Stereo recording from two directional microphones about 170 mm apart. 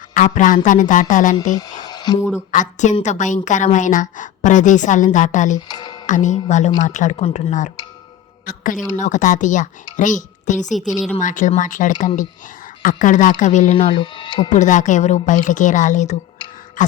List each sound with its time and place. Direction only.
0.1 s a woman's voice: 45° left (ahead or behind)
1.5 s speech: 25° left (ahead or behind)
2.5 s a woman's voice: 45° left (ahead or behind)
5.5 s music: 25° left (ahead or behind)
6.1 s a woman's voice: 45° left (ahead or behind); by 14.5 s 25° left (ahead or behind)
14.5 s a woman's voice: 45° left (ahead or behind)
16.8 s a sound: 50° left (ahead or behind)